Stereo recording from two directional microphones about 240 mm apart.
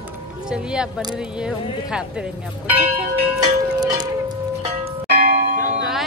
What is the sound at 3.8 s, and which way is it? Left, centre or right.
Music, centre.